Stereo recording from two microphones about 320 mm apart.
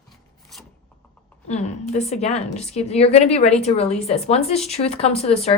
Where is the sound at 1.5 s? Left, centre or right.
Left.